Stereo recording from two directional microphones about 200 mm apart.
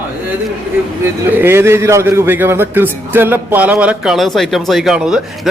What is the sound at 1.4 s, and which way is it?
A man's voice, 10° right (ahead or behind).